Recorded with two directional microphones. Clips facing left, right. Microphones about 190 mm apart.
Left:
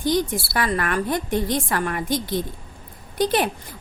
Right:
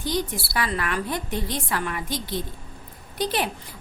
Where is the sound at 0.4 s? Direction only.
50° left (ahead or behind).